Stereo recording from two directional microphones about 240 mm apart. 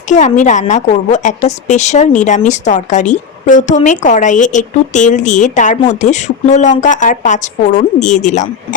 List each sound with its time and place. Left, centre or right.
0.1 s a woman's voice: left